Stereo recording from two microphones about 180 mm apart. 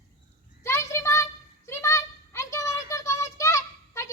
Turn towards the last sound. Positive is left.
turn(degrees=15)  # may be behind; listen again after turning